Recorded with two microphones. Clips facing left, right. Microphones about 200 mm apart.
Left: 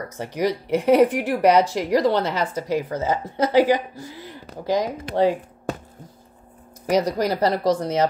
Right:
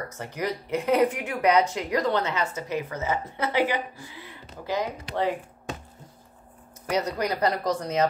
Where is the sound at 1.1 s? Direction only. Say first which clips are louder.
Left 5 dB; 75° left (ahead or behind).